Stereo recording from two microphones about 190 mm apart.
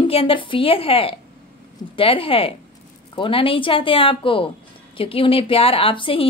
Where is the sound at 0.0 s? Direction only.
30° left (ahead or behind).